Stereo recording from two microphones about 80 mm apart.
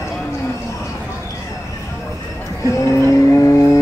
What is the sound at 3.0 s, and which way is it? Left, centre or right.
Vehicle, left.